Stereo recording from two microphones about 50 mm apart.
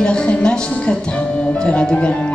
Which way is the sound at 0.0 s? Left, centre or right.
Centre.